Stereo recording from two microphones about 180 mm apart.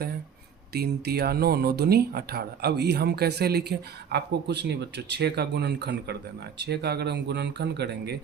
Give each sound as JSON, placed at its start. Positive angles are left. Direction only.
{"t": 0.7, "sound": "speech", "side_deg": -60}